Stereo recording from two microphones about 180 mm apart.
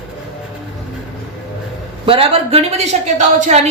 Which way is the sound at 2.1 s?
30° right (ahead or behind).